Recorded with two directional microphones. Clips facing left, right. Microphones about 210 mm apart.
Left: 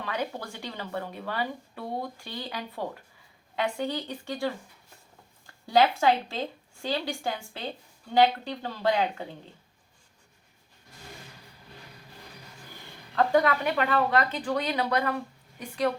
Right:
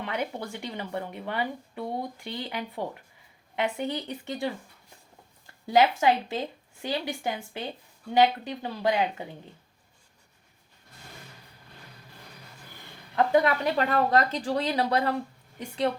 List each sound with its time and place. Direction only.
0.0 s speech: 20° right (ahead or behind)
5.7 s speech: 15° right (ahead or behind)
13.1 s speech: 20° right (ahead or behind)
13.7 s speech: 35° right (ahead or behind)